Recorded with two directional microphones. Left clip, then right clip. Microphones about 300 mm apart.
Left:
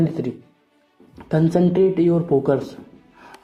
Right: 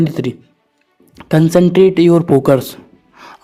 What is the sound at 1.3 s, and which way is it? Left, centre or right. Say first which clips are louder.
Speech: right 7 dB; right.